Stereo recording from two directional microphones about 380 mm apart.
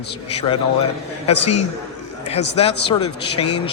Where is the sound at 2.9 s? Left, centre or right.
Centre.